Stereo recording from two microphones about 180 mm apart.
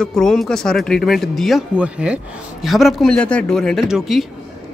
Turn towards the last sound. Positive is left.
turn(degrees=0)  # may be behind; listen again after turning